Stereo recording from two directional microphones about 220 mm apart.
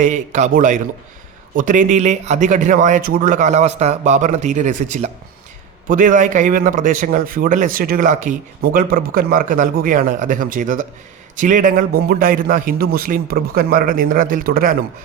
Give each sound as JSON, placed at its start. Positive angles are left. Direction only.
{"t": 0.0, "sound": "a man's voice", "side_deg": -35}